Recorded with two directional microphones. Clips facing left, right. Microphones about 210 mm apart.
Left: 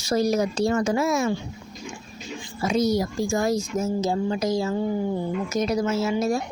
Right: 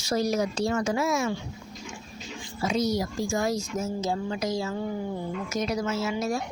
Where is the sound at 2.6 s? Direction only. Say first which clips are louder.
Left 4 dB; 50° left (ahead or behind).